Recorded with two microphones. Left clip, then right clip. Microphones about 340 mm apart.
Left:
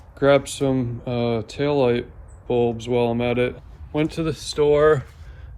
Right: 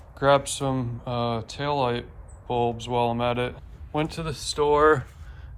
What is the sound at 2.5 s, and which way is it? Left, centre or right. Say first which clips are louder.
Speech: left 4 dB; centre.